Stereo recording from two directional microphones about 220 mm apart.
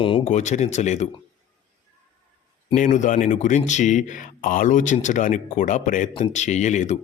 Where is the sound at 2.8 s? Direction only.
35° left (ahead or behind).